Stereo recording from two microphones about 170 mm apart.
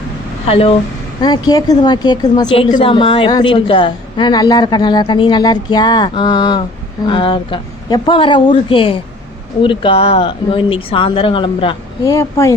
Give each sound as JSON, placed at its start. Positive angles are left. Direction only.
{"t": 0.4, "sound": "speech", "side_deg": 35}
{"t": 1.2, "sound": "a woman's voice", "side_deg": 25}
{"t": 12.1, "sound": "a woman's voice", "side_deg": 20}